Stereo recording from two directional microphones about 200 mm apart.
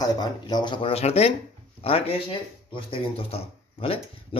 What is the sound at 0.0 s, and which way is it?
Speech, 20° left (ahead or behind).